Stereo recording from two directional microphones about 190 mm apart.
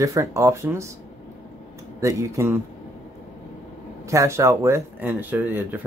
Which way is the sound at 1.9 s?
15° right (ahead or behind).